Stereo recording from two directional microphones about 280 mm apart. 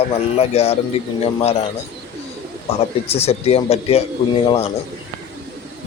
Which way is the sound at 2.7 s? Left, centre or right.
Left.